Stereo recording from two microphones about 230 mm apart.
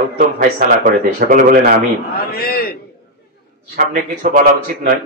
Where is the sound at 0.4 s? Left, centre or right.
Right.